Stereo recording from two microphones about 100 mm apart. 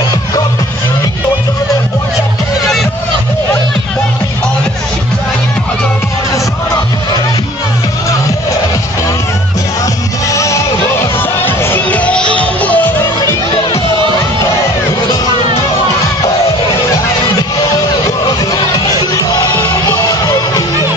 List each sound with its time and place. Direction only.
10.3 s music: 30° left (ahead or behind); by 12.9 s 15° left (ahead or behind)
17.4 s music: 40° left (ahead or behind)